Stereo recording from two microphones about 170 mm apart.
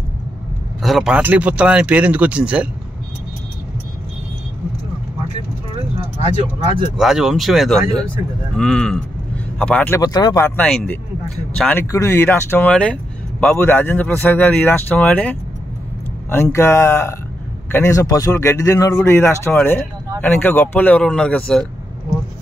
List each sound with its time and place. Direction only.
0.8 s speech: centre (ahead or behind)
7.0 s speech: 5° right (ahead or behind)
11.8 s speech: 15° left (ahead or behind)